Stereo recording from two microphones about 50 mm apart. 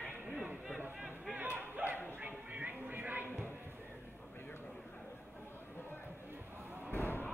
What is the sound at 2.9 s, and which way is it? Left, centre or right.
Music, right.